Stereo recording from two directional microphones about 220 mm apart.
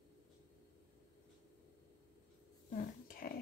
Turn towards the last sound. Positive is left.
turn(degrees=40)  # may be behind; listen again after turning